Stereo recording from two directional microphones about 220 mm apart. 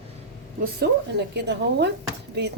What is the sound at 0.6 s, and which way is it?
Speech, 50° right (ahead or behind).